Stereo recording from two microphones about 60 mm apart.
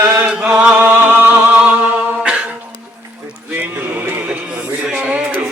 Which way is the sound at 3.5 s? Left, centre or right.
Right.